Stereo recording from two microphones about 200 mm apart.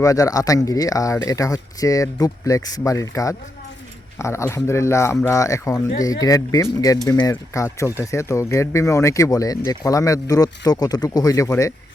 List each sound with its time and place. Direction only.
0.0 s speech: 15° left (ahead or behind)